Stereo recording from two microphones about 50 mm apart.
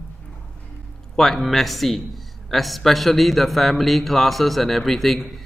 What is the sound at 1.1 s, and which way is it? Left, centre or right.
Speech, centre.